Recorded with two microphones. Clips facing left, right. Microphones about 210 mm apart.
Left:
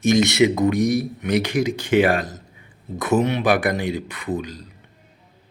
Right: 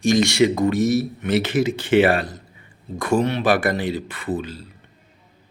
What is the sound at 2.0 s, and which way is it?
Speech, 10° right (ahead or behind).